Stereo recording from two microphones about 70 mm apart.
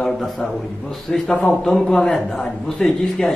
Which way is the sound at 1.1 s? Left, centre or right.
Centre.